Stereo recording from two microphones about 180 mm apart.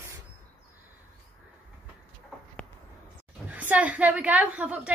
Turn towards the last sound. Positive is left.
turn(degrees=-5)  # may be behind; listen again after turning